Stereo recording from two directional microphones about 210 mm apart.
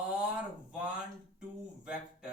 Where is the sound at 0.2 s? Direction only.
5° right (ahead or behind).